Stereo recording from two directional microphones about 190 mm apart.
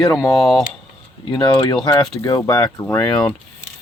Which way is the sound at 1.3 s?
25° left (ahead or behind).